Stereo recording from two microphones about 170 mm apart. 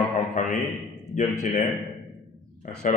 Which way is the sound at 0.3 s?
50° left (ahead or behind).